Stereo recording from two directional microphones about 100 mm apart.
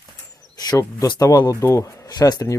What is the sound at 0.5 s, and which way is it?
Speech, 40° left (ahead or behind).